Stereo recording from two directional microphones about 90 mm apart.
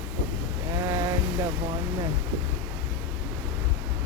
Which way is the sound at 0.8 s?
35° right (ahead or behind).